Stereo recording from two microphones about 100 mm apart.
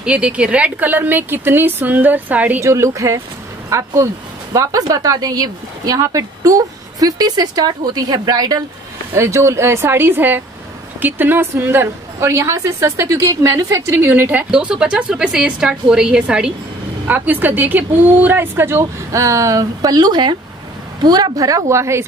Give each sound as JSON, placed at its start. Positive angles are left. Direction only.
{"t": 0.0, "sound": "a woman's voice", "side_deg": -10}
{"t": 2.6, "sound": "a woman's voice", "side_deg": -30}
{"t": 9.1, "sound": "a woman's voice", "side_deg": -30}
{"t": 14.5, "sound": "a woman's voice", "side_deg": -10}